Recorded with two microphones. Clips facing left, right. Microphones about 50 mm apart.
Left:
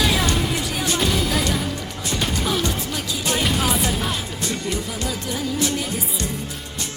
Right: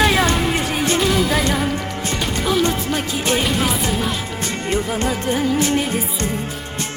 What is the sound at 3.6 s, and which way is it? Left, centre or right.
Music, centre.